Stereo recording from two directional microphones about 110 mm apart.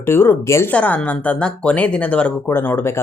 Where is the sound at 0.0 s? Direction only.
20° left (ahead or behind).